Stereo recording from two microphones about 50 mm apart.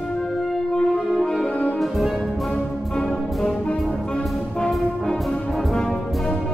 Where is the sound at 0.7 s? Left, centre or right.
Centre.